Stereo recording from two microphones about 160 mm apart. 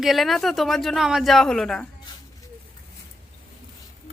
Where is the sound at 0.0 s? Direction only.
Centre (ahead or behind).